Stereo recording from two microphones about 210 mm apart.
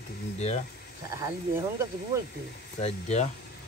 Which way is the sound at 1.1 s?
15° right (ahead or behind).